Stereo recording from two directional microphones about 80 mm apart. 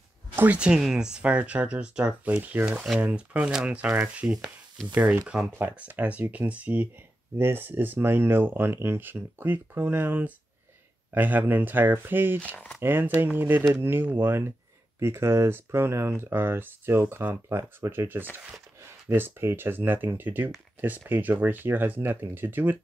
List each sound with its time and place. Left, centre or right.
0.4 s speech: centre
12.4 s speech: centre
12.8 s speech: right